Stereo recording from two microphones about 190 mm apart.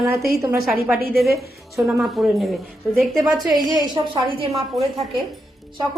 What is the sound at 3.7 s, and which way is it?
Speech, 25° right (ahead or behind).